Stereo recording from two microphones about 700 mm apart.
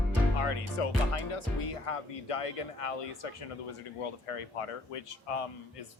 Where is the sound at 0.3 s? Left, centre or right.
Left.